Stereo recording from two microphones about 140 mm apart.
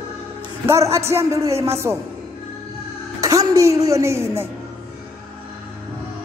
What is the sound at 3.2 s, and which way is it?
Speech, 25° right (ahead or behind).